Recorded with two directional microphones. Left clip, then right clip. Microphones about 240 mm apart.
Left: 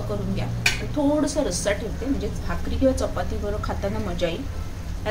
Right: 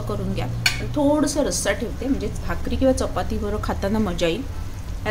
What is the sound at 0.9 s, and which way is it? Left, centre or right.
A woman's voice, right.